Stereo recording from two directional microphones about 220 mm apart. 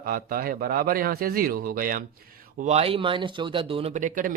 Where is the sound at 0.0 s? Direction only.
40° right (ahead or behind).